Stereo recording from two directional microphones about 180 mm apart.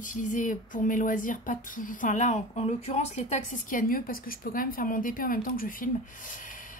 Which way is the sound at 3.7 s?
50° left (ahead or behind).